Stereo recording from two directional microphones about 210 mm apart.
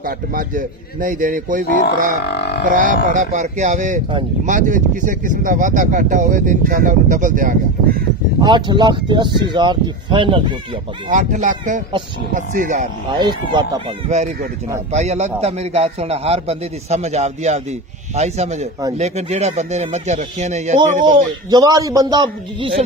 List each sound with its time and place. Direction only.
0.0 s speech: 40° right (ahead or behind)
2.2 s music: 50° left (ahead or behind)
2.6 s speech: 40° right (ahead or behind)
8.4 s a man's voice: 20° right (ahead or behind)
11.1 s speech: 35° right (ahead or behind)
13.1 s a man's voice: 20° right (ahead or behind)
14.0 s speech: 30° right (ahead or behind)
21.1 s a man's voice: 20° right (ahead or behind)